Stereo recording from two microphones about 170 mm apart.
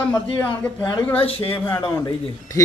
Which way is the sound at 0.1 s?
10° left (ahead or behind).